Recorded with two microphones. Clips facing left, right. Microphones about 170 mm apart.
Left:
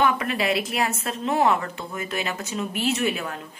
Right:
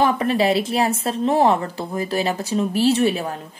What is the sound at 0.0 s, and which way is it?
Speech, 35° right (ahead or behind).